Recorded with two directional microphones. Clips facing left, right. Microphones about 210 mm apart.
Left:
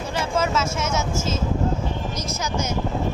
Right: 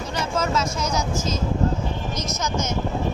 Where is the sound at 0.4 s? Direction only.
5° left (ahead or behind).